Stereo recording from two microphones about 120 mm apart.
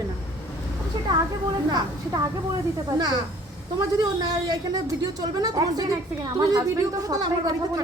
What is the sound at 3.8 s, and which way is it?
A man's voice, 30° right (ahead or behind).